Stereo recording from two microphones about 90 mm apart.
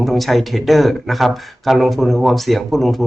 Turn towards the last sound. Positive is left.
turn(degrees=0)  # may be behind; listen again after turning